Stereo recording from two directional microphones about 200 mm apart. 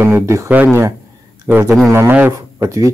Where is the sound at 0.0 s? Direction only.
15° right (ahead or behind).